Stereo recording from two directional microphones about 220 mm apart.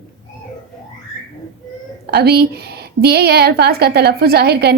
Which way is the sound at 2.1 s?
50° right (ahead or behind).